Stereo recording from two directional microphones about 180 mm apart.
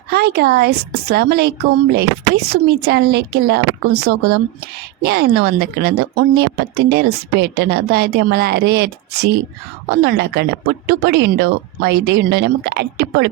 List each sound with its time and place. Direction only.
0.1 s speech: 65° right (ahead or behind)